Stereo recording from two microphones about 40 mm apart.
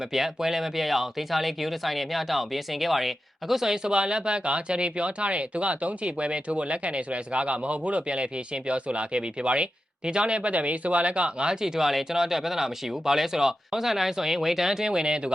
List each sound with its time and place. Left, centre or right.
0.1 s speech: centre
3.9 s speech: right
11.6 s speech: centre